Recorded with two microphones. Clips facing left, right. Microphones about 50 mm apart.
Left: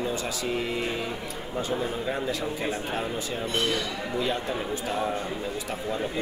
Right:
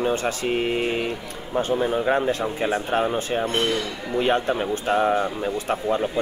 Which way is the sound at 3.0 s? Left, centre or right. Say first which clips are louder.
Right 7 dB; right.